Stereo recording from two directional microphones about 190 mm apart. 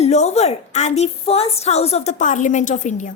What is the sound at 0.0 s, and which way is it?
A woman's voice, 35° left (ahead or behind).